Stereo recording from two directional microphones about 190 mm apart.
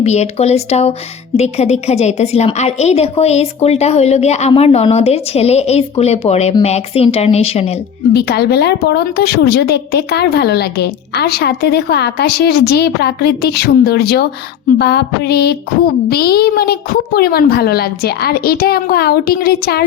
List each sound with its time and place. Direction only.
0.0 s a woman's voice: 35° left (ahead or behind)
8.1 s a woman's voice: 60° left (ahead or behind)